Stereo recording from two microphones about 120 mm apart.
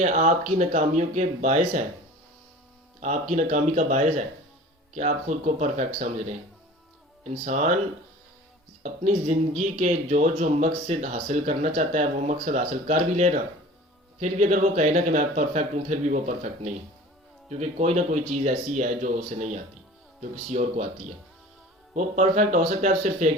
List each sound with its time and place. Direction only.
0.0 s speech: 90° right
3.0 s speech: 85° right
4.9 s speech: 80° right
7.3 s speech: 90° right
8.8 s speech: 75° right (ahead or behind)
17.5 s speech: 70° right (ahead or behind)